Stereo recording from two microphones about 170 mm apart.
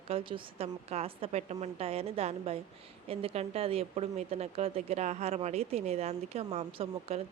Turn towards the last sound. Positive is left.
turn(degrees=-40)  # may be behind; listen again after turning